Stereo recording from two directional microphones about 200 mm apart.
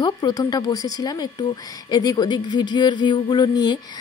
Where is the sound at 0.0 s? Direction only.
20° left (ahead or behind).